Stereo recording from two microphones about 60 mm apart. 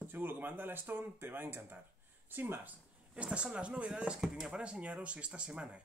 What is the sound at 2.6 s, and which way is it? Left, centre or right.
Speech, right.